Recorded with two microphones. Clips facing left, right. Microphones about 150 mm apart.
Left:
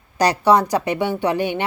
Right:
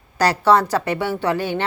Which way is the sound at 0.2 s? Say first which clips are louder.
Even; 15° left (ahead or behind).